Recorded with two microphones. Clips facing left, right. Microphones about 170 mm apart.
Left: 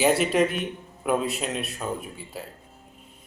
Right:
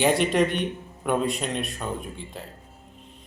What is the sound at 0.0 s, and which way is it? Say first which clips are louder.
A man's voice: even; 5° left (ahead or behind).